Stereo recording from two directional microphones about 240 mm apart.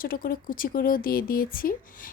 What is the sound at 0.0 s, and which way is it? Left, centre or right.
A woman's voice, left.